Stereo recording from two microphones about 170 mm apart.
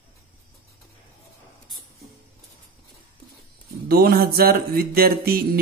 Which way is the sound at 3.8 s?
65° right (ahead or behind).